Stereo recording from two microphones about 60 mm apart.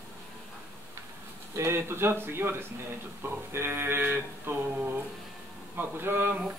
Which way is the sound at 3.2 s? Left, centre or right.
Right.